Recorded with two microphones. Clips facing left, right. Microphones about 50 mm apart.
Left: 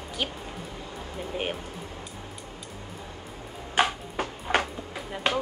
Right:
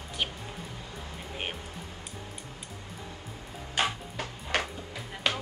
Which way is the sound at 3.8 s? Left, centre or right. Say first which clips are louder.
Left 5 dB; left.